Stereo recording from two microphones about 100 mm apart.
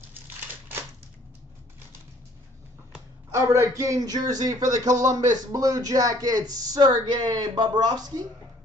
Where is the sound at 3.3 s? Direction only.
30° right (ahead or behind).